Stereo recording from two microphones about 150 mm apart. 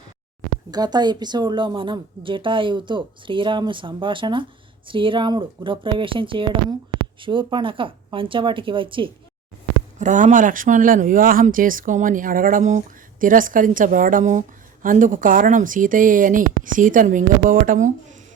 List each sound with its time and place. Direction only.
0.7 s speech: 25° right (ahead or behind)
10.0 s speech: 55° right (ahead or behind)